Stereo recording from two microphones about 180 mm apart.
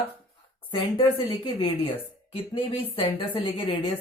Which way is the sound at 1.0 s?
30° left (ahead or behind).